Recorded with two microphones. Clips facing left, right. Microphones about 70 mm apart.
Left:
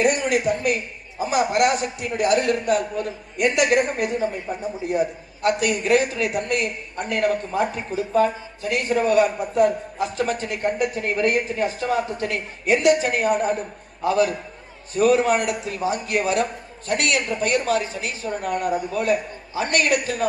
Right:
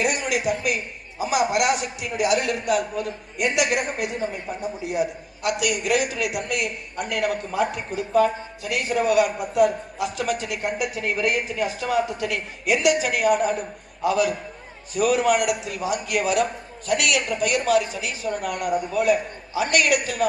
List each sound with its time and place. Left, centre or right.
0.0 s a man's voice: left